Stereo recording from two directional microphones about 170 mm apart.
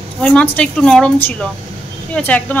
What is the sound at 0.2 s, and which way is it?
A woman's voice, 5° left (ahead or behind).